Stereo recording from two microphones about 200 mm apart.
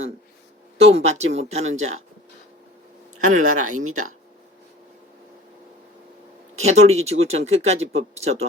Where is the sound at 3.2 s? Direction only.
90° right.